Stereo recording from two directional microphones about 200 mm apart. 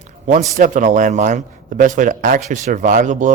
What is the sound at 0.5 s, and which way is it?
Speech, 40° right (ahead or behind).